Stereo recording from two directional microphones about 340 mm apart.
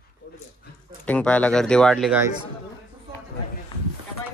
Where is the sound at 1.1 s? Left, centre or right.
Centre.